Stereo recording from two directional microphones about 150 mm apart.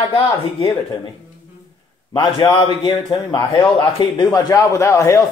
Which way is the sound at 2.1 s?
30° left (ahead or behind).